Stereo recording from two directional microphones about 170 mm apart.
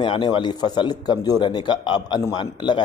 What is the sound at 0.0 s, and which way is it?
A man's voice, 30° left (ahead or behind).